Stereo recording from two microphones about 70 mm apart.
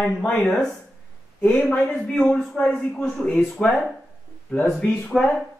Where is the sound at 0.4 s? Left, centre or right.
Centre.